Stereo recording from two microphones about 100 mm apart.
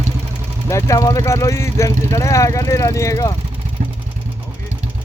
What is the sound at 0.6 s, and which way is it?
Speech, 30° left (ahead or behind).